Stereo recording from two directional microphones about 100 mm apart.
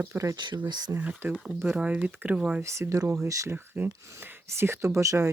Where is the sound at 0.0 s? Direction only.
25° right (ahead or behind).